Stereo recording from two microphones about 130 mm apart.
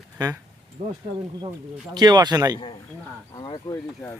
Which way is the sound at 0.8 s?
50° right (ahead or behind).